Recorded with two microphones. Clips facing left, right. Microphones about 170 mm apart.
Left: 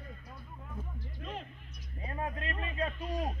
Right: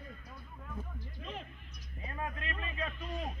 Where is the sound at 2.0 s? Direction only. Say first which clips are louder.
Left 3 dB; 30° left (ahead or behind).